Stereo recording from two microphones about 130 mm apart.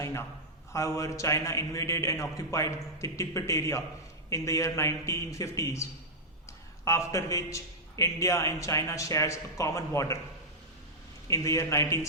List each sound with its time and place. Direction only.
0.0 s a sound: 20° left (ahead or behind)
0.7 s a man's voice: 20° left (ahead or behind)
11.3 s a man's voice: 25° left (ahead or behind)